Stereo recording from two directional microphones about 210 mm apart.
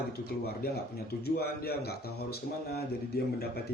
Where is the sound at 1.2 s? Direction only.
50° left (ahead or behind).